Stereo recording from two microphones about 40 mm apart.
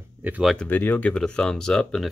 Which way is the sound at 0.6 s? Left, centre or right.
Left.